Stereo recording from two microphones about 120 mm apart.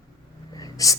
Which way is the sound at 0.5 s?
30° left (ahead or behind).